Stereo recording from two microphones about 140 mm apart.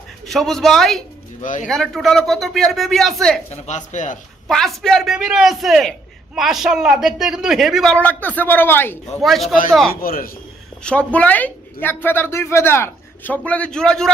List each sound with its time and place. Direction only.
0.3 s a man's voice: centre (ahead or behind)
1.4 s speech: 70° left (ahead or behind)
1.6 s a man's voice: centre (ahead or behind)
3.7 s speech: 60° left (ahead or behind)
4.4 s a man's voice: centre (ahead or behind)
9.2 s a man's voice: centre (ahead or behind)
9.9 s a man's voice: 90° left
10.8 s speech: 10° left (ahead or behind)